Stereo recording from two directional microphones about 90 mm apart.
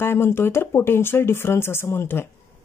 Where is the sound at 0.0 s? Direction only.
25° left (ahead or behind).